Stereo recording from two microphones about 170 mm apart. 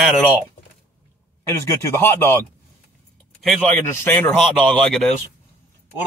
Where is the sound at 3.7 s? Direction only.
15° left (ahead or behind).